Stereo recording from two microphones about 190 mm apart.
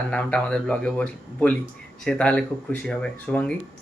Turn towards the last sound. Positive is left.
turn(degrees=5)  # may be behind; listen again after turning